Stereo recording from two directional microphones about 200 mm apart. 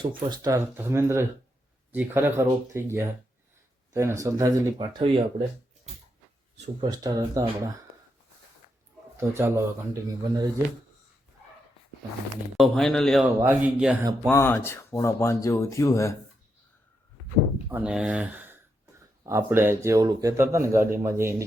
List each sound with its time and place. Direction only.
0.2 s speech: 20° right (ahead or behind)
6.8 s speech: 20° right (ahead or behind)
9.3 s speech: 15° right (ahead or behind)
12.5 s speech: centre (ahead or behind)
13.2 s speech: 10° right (ahead or behind)
14.3 s speech: 10° left (ahead or behind)
17.7 s speech: 5° right (ahead or behind)